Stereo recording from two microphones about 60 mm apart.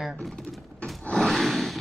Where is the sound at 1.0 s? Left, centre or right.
Centre.